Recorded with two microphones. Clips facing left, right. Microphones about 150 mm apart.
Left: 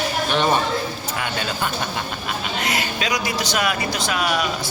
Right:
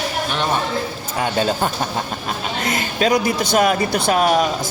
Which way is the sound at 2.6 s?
50° right (ahead or behind).